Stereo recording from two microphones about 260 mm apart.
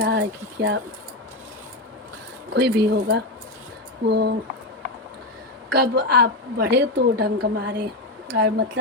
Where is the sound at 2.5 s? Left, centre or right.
Right.